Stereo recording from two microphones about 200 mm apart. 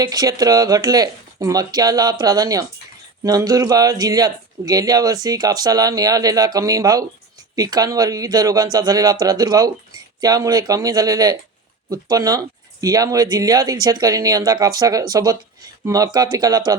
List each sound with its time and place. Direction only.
0.0 s speech: 20° right (ahead or behind)